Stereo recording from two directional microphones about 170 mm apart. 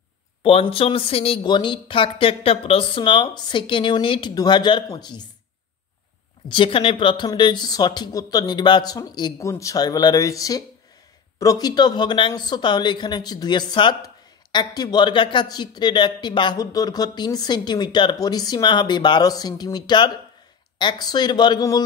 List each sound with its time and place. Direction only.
0.4 s speech: 30° left (ahead or behind)
6.5 s a man's voice: 30° left (ahead or behind)